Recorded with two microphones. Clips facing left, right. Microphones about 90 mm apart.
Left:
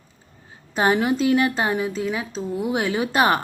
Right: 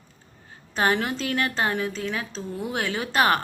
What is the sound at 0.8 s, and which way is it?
A woman's voice, 15° left (ahead or behind).